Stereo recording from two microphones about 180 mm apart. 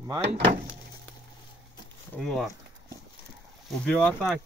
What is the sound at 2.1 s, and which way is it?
Speech, 5° left (ahead or behind).